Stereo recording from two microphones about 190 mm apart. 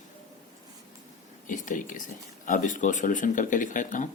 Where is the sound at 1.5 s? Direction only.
45° left (ahead or behind).